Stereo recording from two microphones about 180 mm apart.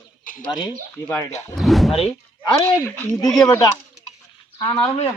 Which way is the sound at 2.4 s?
30° left (ahead or behind).